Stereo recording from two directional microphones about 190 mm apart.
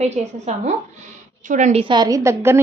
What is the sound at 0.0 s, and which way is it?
A woman's voice, 35° right (ahead or behind).